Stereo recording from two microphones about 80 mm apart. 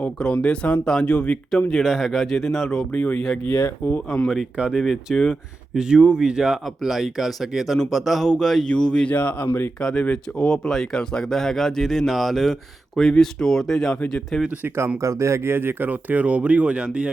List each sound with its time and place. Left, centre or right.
0.0 s speech: centre
1.7 s speech: centre; by 4.0 s left
4.5 s speech: centre
4.8 s speech: centre
5.7 s speech: centre
15.0 s speech: right; by 17.1 s centre